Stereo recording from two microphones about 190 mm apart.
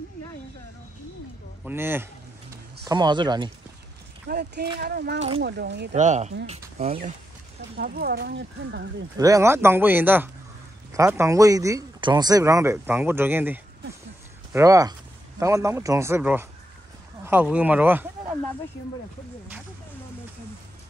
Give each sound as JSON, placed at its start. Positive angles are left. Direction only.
{"t": 1.6, "sound": "speech", "side_deg": -10}
{"t": 4.3, "sound": "speech", "side_deg": -60}
{"t": 5.9, "sound": "speech", "side_deg": -40}
{"t": 7.7, "sound": "speech", "side_deg": -55}
{"t": 9.2, "sound": "speech", "side_deg": -15}